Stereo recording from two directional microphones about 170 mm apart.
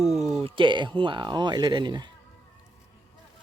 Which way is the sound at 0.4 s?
30° right (ahead or behind).